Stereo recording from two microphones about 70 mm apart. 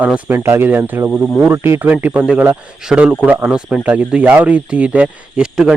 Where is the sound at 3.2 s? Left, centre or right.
Right.